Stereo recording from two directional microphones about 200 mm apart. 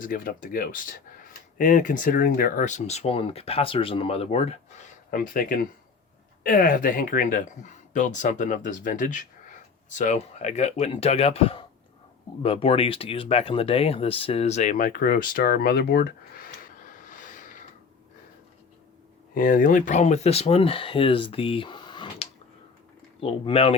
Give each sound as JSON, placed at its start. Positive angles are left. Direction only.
{"t": 0.0, "sound": "speech", "side_deg": 45}
{"t": 5.1, "sound": "speech", "side_deg": 45}
{"t": 19.3, "sound": "speech", "side_deg": 40}